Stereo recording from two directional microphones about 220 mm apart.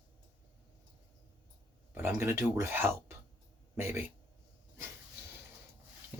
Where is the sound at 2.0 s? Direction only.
10° right (ahead or behind).